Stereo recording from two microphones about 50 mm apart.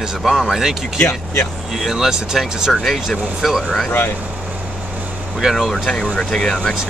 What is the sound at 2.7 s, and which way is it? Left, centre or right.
Speech, centre.